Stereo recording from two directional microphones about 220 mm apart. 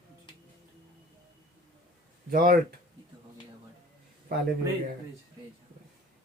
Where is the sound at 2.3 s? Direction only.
40° right (ahead or behind).